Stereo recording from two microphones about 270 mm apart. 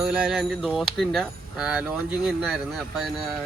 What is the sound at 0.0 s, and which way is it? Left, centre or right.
Speech, centre.